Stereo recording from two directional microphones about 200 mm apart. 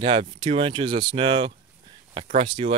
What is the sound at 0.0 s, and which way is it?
Speech, 25° right (ahead or behind).